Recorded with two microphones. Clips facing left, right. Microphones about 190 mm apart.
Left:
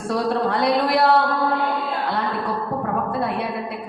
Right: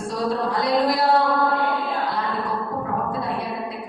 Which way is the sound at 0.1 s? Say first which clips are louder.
Left 3 dB; 65° left (ahead or behind).